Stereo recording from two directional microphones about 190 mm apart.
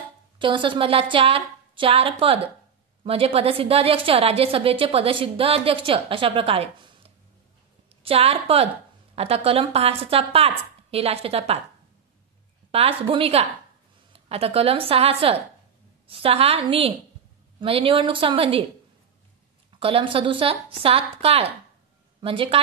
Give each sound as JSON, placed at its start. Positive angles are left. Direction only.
{"t": 0.4, "sound": "a woman's voice", "side_deg": -25}
{"t": 12.7, "sound": "a woman's voice", "side_deg": -30}
{"t": 19.8, "sound": "a woman's voice", "side_deg": -30}